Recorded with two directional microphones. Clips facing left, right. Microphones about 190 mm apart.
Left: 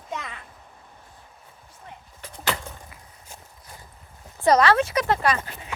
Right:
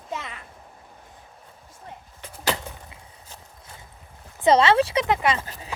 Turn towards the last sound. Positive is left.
turn(degrees=-20)  # may be behind; listen again after turning